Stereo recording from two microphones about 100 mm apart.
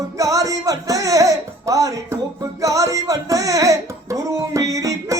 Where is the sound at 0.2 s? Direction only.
35° right (ahead or behind).